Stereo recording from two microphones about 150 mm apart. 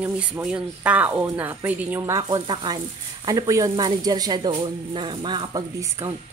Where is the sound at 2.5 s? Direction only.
30° right (ahead or behind).